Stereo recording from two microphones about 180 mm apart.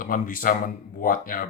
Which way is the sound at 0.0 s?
50° left (ahead or behind).